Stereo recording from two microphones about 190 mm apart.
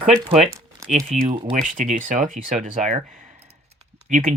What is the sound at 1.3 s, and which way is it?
Speech, 45° right (ahead or behind).